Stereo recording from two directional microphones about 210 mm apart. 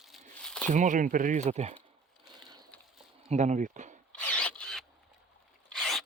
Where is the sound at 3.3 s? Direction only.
35° right (ahead or behind).